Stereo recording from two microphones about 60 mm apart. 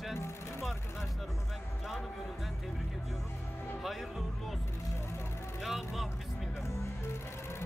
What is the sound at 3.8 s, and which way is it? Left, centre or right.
Speech, centre.